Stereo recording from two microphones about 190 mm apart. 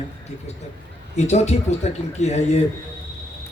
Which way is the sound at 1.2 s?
35° left (ahead or behind).